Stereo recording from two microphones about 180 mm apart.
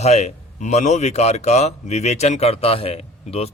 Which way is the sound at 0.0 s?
40° left (ahead or behind).